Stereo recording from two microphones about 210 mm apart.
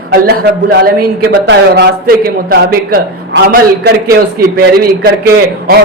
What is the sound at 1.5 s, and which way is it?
A man's voice, 55° right (ahead or behind).